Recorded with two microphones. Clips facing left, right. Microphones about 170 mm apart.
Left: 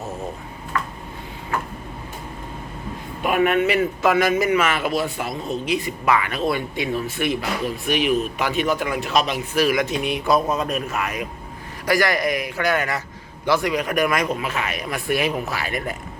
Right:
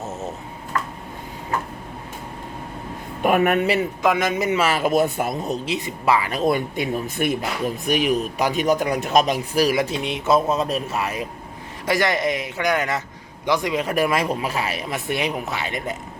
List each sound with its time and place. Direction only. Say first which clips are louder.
3.2 s speech: right 1 dB; 45° right (ahead or behind)
3.8 s speech: left 2 dB; 20° right (ahead or behind)
4.6 s speech: right 3 dB; 40° right (ahead or behind)
5.6 s speech: left 2 dB; 25° right (ahead or behind)
9.9 s speech: even; 25° right (ahead or behind)